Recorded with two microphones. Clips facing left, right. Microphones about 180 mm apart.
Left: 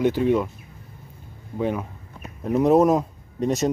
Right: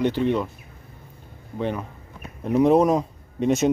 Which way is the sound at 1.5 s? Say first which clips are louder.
Left 2 dB; 5° left (ahead or behind).